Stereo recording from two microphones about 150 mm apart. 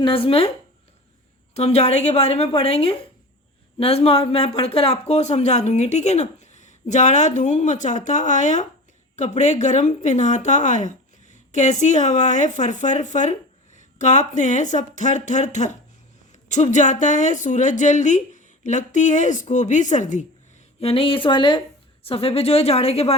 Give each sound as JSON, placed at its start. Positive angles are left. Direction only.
{"t": 0.0, "sound": "a woman's voice", "side_deg": 35}
{"t": 1.5, "sound": "speech", "side_deg": 45}
{"t": 20.8, "sound": "a woman's voice", "side_deg": 40}